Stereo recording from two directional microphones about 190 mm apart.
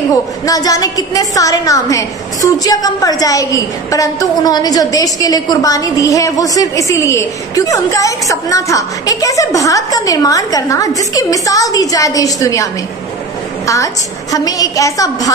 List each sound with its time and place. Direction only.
0.1 s a woman's voice: 20° left (ahead or behind)
14.3 s a woman's voice: 20° left (ahead or behind)